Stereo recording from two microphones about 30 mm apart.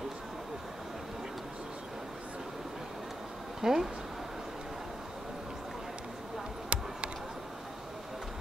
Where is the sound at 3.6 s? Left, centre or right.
Centre.